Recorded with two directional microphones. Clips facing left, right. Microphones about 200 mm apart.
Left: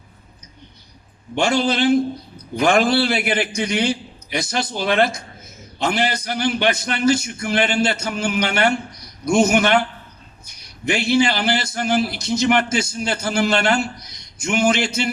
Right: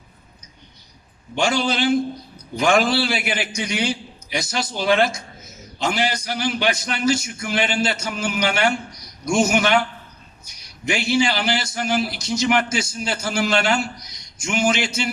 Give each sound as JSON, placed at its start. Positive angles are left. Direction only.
{"t": 2.6, "sound": "a man's voice", "side_deg": 55}